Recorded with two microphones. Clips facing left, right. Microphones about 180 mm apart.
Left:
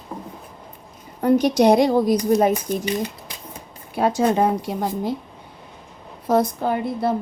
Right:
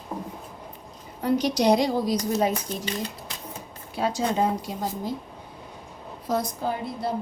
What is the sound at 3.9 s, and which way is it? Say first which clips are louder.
A woman's voice: left 6 dB; 55° left (ahead or behind).